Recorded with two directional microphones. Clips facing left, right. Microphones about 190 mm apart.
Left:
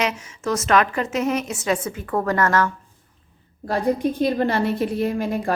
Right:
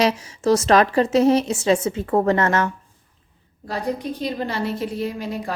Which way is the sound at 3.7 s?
50° left (ahead or behind).